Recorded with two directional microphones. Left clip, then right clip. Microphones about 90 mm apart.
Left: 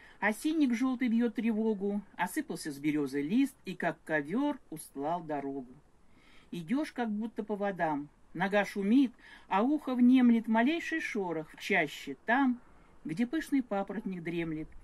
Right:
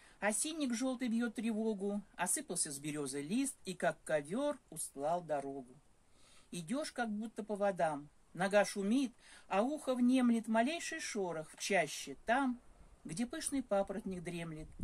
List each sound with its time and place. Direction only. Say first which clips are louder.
0.2 s speech: left 7 dB; 35° right (ahead or behind)
6.5 s speech: left 5 dB; 35° right (ahead or behind)